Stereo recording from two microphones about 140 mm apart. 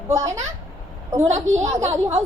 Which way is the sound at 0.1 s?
55° right (ahead or behind).